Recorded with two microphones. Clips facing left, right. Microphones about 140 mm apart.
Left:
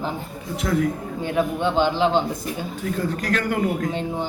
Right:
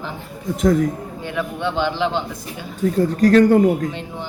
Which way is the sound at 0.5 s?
45° right (ahead or behind).